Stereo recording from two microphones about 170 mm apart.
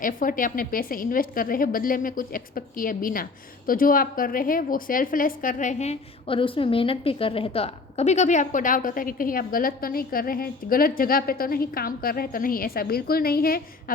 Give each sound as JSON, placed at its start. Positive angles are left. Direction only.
{"t": 0.0, "sound": "a woman's voice", "side_deg": 55}